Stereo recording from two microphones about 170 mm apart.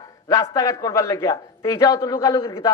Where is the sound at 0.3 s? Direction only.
20° left (ahead or behind).